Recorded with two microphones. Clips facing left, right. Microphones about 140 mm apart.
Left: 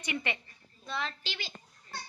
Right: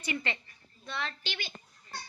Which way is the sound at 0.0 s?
15° left (ahead or behind).